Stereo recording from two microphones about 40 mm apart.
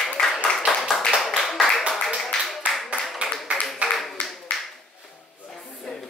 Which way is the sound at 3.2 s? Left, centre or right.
Right.